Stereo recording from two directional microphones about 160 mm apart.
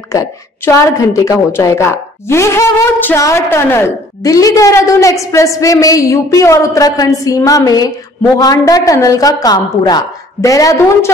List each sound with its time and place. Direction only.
0.1 s a woman's voice: 20° left (ahead or behind)